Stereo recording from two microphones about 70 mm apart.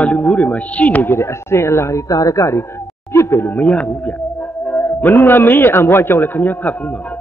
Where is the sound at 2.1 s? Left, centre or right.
Left.